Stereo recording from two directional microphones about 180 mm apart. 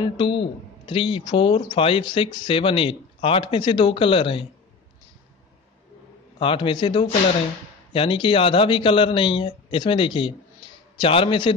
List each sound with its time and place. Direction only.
0.0 s speech: 25° left (ahead or behind)
6.4 s speech: 25° left (ahead or behind)